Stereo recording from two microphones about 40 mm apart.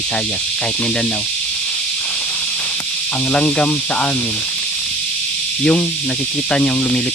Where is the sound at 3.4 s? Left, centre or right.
Left.